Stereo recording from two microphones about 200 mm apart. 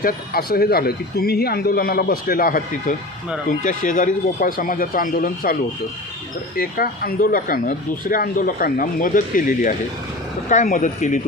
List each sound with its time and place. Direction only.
0.0 s speech: 50° left (ahead or behind)
6.6 s speech: 45° left (ahead or behind)